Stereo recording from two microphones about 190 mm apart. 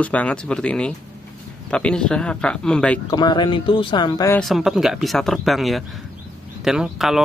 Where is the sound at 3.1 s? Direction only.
20° left (ahead or behind).